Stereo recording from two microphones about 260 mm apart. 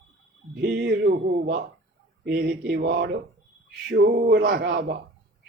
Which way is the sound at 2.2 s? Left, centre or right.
Right.